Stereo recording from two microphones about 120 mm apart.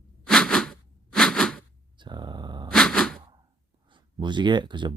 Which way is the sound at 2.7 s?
5° left (ahead or behind).